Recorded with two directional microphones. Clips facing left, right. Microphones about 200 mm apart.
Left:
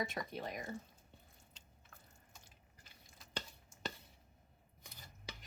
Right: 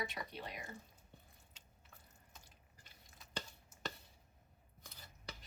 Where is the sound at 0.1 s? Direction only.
50° left (ahead or behind).